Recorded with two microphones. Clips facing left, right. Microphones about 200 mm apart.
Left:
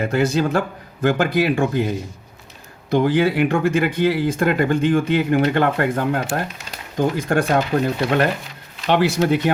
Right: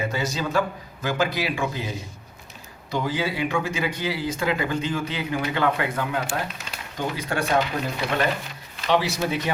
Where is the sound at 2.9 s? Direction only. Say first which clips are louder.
Left 9 dB; 60° left (ahead or behind).